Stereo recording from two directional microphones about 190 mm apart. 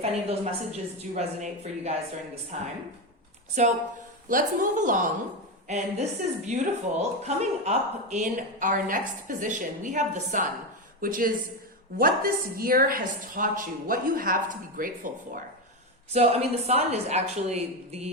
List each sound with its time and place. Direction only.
0.0 s a woman's voice: 35° right (ahead or behind)
3.6 s a woman's voice: 40° right (ahead or behind)
16.1 s a woman's voice: 35° right (ahead or behind)